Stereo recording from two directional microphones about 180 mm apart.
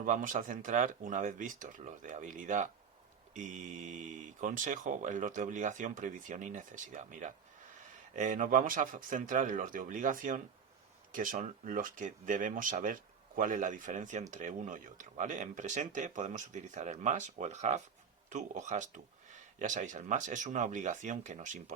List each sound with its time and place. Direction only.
0.0 s speech: 45° right (ahead or behind)